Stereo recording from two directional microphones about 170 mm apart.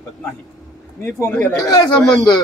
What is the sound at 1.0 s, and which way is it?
Speech, 15° left (ahead or behind).